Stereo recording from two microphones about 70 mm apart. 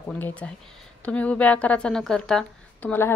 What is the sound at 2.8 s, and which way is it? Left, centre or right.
Speech, left.